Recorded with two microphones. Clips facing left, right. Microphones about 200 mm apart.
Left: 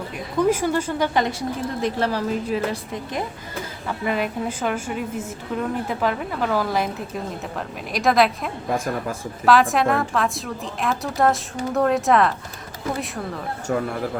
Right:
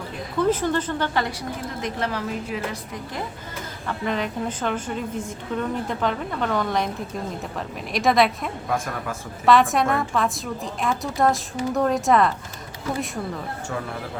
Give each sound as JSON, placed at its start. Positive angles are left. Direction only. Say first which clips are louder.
{"t": 0.3, "sound": "a woman's voice", "louder": "left 2 dB", "side_deg": 10}
{"t": 1.8, "sound": "a woman's voice", "louder": "left 4 dB", "side_deg": 35}
{"t": 3.8, "sound": "a woman's voice", "louder": "left 2 dB", "side_deg": 10}
{"t": 7.9, "sound": "a woman's voice", "louder": "left 1 dB", "side_deg": 0}
{"t": 9.5, "sound": "a woman's voice", "louder": "left 1 dB", "side_deg": 0}